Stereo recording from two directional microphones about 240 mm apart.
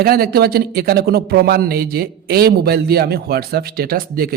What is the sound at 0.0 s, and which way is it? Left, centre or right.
Speech, right.